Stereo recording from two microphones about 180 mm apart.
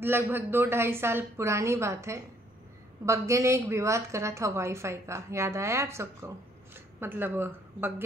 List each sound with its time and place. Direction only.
0.0 s a woman's voice: 10° right (ahead or behind)